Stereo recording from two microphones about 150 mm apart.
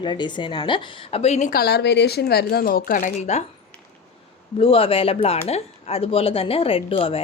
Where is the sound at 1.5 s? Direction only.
90° left; by 3.4 s 55° left (ahead or behind).